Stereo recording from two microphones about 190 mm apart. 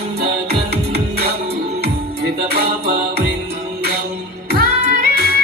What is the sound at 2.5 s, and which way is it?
Music, 60° right (ahead or behind).